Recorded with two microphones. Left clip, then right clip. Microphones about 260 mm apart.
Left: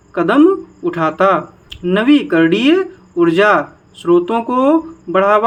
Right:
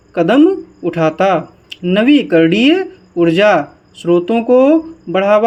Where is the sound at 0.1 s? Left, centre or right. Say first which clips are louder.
Right 1 dB; centre.